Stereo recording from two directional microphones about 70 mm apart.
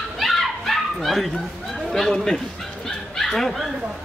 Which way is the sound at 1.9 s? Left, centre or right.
Centre.